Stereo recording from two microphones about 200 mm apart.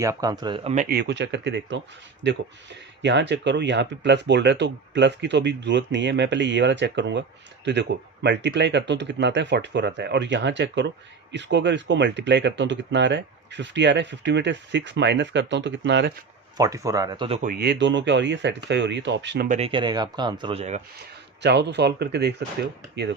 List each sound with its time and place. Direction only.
0.0 s speech: 15° right (ahead or behind)
0.9 s speech: 55° right (ahead or behind)
16.6 s speech: 15° right (ahead or behind)
17.4 s speech: 50° right (ahead or behind)
19.5 s speech: 30° right (ahead or behind)
21.4 s speech: 60° right (ahead or behind)